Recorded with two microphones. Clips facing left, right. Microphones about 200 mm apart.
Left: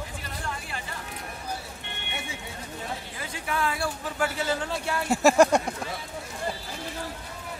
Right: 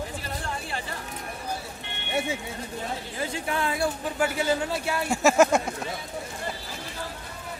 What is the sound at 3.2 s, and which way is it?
Speech, 30° right (ahead or behind).